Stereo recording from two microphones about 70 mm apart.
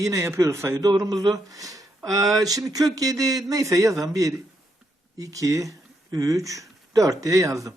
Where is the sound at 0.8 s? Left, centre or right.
Right.